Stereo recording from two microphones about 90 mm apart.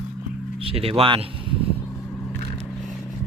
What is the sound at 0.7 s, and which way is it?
Speech, 90° right.